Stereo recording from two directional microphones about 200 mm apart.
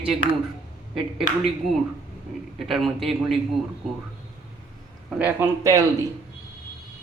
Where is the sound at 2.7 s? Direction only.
Centre (ahead or behind).